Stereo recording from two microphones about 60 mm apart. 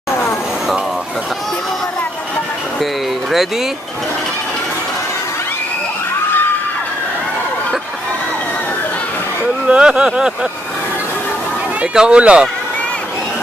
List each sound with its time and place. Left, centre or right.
2.8 s music: centre
9.7 s speech: centre
11.8 s speech: centre